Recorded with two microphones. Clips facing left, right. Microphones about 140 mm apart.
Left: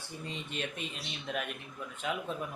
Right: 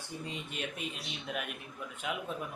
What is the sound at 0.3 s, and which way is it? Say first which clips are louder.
Speech: left 3 dB; 10° right (ahead or behind).